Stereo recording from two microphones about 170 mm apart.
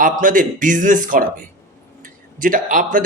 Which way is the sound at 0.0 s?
50° right (ahead or behind).